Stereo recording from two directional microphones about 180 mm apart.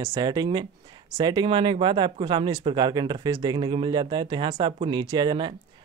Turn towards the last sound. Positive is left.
turn(degrees=-25)  # may be behind; listen again after turning